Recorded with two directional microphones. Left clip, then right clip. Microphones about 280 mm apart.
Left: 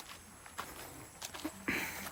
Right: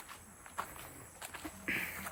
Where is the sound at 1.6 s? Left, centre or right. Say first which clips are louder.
Even; left.